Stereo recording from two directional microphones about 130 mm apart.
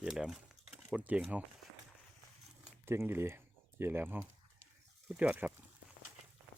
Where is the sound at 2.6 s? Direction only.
20° right (ahead or behind).